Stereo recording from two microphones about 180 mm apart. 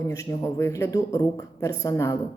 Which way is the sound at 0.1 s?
15° left (ahead or behind).